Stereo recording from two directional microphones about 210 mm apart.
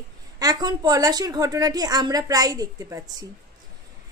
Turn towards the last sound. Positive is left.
turn(degrees=-15)  # may be behind; listen again after turning